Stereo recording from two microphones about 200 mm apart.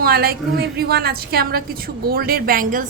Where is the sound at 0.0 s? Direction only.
50° right (ahead or behind).